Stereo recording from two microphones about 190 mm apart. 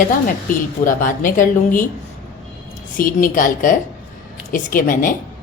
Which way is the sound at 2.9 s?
45° left (ahead or behind).